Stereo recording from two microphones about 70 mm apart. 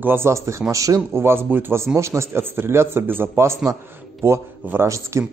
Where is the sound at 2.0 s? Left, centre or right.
Right.